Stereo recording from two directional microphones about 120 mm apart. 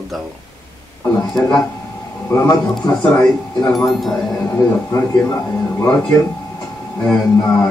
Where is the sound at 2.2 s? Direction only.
25° left (ahead or behind).